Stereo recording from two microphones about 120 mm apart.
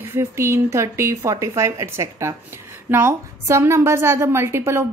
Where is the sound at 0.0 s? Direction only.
20° right (ahead or behind).